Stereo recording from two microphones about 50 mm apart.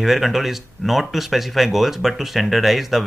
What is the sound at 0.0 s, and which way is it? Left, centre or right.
Speech, centre.